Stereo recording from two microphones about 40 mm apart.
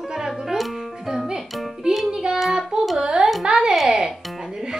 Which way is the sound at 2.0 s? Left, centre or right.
Centre.